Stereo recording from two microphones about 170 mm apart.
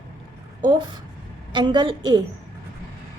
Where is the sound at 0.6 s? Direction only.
25° right (ahead or behind).